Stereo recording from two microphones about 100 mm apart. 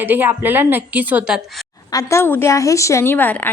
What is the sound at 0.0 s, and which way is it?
A woman's voice, 20° right (ahead or behind).